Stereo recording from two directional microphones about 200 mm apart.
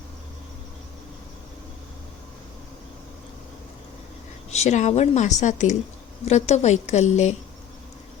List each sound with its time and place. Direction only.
4.5 s a woman's voice: 35° left (ahead or behind)